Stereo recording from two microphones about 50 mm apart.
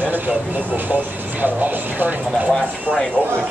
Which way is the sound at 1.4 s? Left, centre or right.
Right.